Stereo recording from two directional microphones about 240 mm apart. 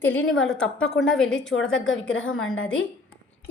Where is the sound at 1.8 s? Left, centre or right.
Left.